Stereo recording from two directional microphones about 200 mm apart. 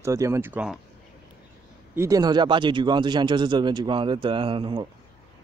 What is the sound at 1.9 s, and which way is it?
Speech, 15° right (ahead or behind).